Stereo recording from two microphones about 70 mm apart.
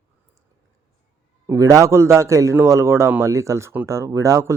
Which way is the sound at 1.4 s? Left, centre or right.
Right.